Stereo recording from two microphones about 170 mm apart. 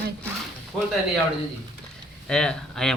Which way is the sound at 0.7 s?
5° left (ahead or behind).